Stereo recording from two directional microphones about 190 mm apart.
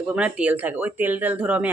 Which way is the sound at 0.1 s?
5° right (ahead or behind).